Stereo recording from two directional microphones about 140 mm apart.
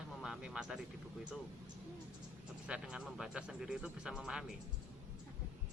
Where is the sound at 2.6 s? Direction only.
5° right (ahead or behind).